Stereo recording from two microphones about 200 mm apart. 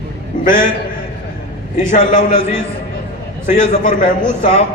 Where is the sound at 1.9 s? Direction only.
40° left (ahead or behind).